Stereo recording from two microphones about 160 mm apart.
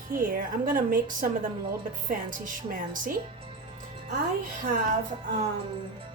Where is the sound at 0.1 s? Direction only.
65° right (ahead or behind).